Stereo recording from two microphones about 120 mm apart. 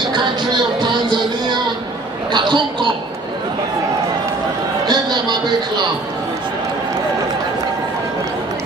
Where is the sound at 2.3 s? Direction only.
40° right (ahead or behind).